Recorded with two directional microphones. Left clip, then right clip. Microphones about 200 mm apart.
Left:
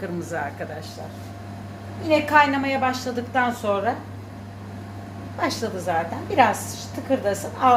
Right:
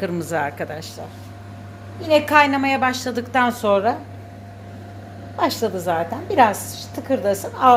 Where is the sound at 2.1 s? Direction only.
40° right (ahead or behind).